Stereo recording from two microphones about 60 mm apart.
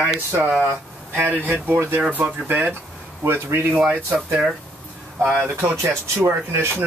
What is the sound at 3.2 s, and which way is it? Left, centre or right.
Speech, right.